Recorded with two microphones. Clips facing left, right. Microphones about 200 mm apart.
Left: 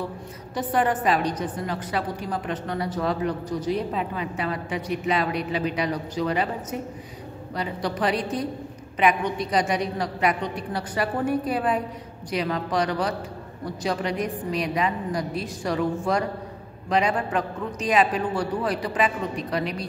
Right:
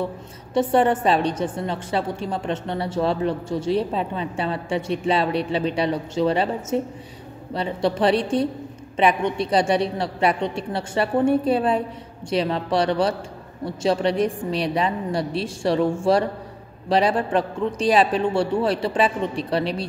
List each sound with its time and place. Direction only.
0.6 s a woman's voice: 25° right (ahead or behind)